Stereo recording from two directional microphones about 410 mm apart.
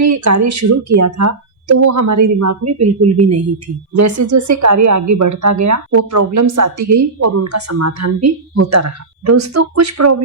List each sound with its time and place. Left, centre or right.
0.0 s a woman's voice: right